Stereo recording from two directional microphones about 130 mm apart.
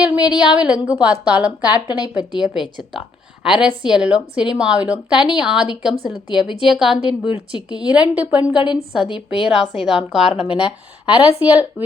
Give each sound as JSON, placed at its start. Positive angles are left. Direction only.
{"t": 0.0, "sound": "a woman's voice", "side_deg": -10}
{"t": 10.3, "sound": "speech", "side_deg": 45}
{"t": 11.0, "sound": "a woman's voice", "side_deg": -10}